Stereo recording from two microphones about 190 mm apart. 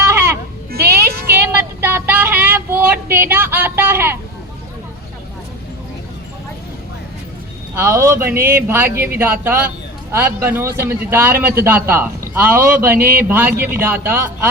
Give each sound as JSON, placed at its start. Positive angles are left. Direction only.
{"t": 0.0, "sound": "a sound", "side_deg": -15}
{"t": 0.7, "sound": "music", "side_deg": -55}
{"t": 1.3, "sound": "a sound", "side_deg": -10}
{"t": 7.8, "sound": "a man's voice", "side_deg": -15}
{"t": 13.0, "sound": "a man's voice", "side_deg": -50}
{"t": 13.2, "sound": "a man's voice", "side_deg": -10}